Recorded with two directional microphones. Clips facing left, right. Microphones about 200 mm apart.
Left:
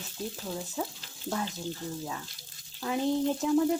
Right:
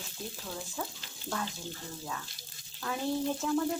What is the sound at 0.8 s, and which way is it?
Speech, 15° left (ahead or behind).